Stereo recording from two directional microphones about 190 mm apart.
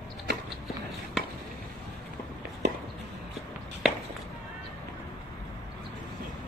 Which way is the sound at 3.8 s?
5° right (ahead or behind).